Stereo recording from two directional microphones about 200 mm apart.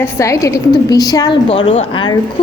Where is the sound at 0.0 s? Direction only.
15° left (ahead or behind).